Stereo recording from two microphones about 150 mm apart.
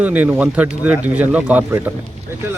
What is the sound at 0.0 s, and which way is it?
Speech, 10° right (ahead or behind).